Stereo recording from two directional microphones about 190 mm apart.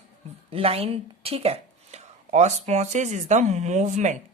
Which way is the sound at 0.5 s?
30° right (ahead or behind).